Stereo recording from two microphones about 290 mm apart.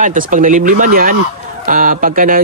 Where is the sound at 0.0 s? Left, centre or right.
Right.